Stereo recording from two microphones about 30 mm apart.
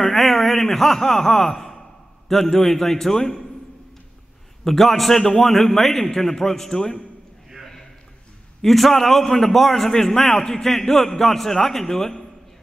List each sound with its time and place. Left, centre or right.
0.0 s a sound: centre
2.2 s a man's voice: centre
4.6 s a man's voice: centre
8.6 s a man's voice: centre